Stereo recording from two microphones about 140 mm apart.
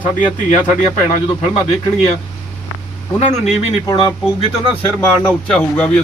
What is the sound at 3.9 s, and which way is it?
Speech, 35° left (ahead or behind).